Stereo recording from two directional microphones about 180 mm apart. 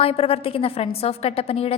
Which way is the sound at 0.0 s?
30° left (ahead or behind).